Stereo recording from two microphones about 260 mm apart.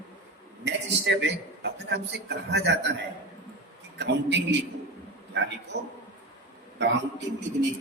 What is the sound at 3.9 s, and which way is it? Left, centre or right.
Speech, right.